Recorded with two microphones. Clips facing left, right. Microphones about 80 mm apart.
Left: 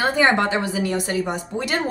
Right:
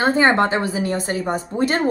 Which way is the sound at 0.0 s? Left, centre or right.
Right.